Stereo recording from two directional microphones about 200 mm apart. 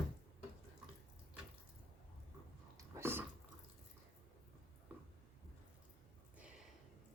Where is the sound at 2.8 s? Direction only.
15° right (ahead or behind).